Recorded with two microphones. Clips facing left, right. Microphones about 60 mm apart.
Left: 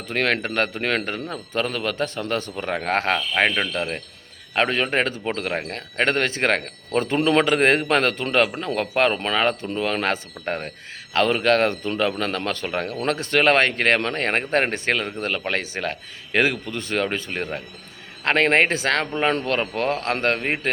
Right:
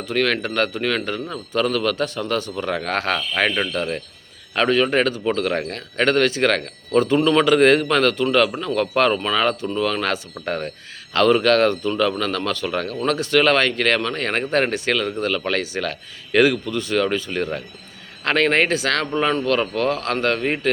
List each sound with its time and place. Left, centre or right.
0.0 s a man's voice: left